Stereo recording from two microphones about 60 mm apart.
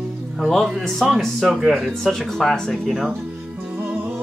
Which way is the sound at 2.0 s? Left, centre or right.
Centre.